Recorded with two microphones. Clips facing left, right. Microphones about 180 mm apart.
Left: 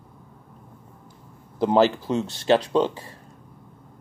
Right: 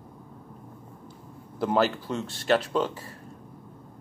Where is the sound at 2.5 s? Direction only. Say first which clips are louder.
Left 5 dB; 30° left (ahead or behind).